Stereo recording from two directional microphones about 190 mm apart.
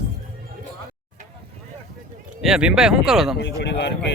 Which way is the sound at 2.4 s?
5° right (ahead or behind).